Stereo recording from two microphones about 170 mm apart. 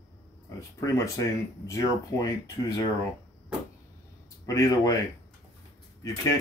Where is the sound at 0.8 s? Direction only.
20° left (ahead or behind).